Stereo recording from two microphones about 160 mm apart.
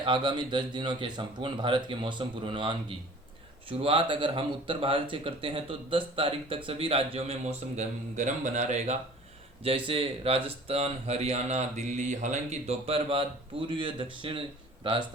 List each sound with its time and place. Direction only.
0.0 s speech: 30° right (ahead or behind); by 9.0 s 45° right (ahead or behind)
9.6 s speech: 35° right (ahead or behind)